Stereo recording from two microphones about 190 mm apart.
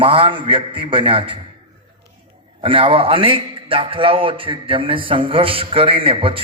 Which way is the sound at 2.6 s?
25° right (ahead or behind).